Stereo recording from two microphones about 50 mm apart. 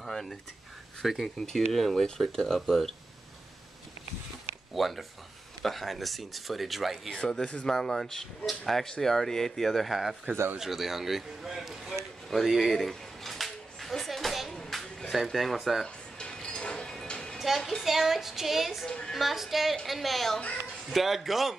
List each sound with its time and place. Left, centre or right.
0.0 s a sound: centre
1.0 s speech: centre
4.7 s speech: centre
7.2 s speech: centre
11.9 s a sound: centre
14.7 s speech: centre
16.2 s music: centre
17.4 s a woman's voice: centre
18.9 s a woman's voice: centre
19.1 s speech: centre